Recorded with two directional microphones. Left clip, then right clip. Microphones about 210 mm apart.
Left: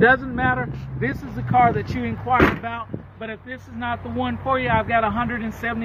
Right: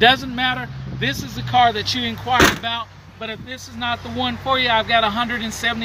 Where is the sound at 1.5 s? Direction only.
20° right (ahead or behind).